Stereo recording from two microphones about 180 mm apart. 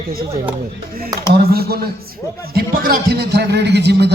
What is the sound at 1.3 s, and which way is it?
A man's voice, 60° right (ahead or behind).